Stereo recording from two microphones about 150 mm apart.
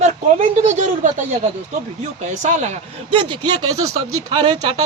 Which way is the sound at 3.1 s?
35° right (ahead or behind).